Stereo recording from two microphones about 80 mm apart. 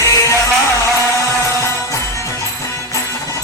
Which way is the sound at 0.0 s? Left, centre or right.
Left.